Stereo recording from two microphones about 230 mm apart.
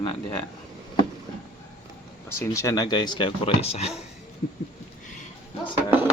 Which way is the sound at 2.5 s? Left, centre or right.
Centre.